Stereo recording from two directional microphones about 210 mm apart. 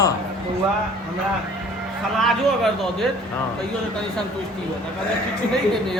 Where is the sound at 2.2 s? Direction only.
Centre (ahead or behind).